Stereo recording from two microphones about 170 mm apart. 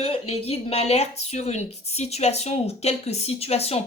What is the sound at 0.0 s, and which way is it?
A woman's voice, 35° left (ahead or behind).